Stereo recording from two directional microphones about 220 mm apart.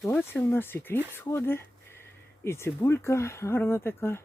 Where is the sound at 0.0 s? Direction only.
10° left (ahead or behind).